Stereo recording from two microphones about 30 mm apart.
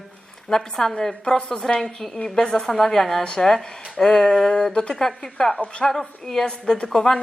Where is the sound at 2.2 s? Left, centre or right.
Left.